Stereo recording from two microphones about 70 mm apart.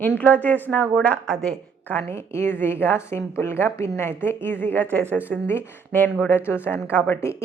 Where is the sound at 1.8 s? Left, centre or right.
Left.